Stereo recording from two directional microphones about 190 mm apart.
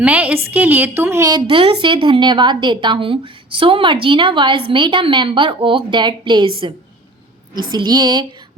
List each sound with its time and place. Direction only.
0.0 s speech: 10° right (ahead or behind)
1.5 s a woman's voice: 30° right (ahead or behind)
7.5 s a woman's voice: 25° right (ahead or behind)